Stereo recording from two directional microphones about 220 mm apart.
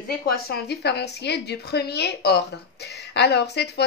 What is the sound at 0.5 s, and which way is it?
A woman's voice, 50° left (ahead or behind).